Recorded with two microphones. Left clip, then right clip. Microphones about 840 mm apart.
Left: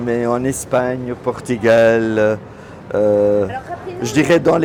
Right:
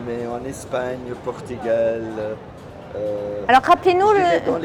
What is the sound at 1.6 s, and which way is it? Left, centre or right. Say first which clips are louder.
Speech: left 8 dB; left.